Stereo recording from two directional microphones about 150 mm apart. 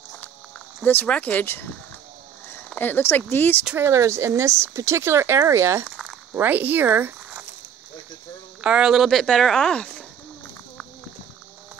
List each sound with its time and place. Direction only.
0.8 s speech: 10° left (ahead or behind)
2.7 s speech: 15° left (ahead or behind)
3.6 s speech: 15° right (ahead or behind)
8.5 s speech: 5° right (ahead or behind)